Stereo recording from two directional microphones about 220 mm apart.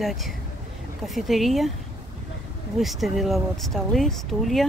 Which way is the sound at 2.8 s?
Centre (ahead or behind).